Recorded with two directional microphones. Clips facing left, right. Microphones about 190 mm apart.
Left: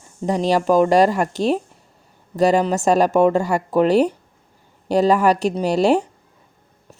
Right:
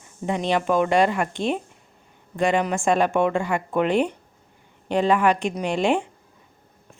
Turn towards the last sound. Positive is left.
turn(degrees=40)  # may be behind; listen again after turning